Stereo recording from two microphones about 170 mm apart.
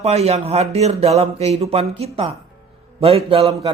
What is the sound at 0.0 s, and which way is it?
A man's voice, 40° right (ahead or behind).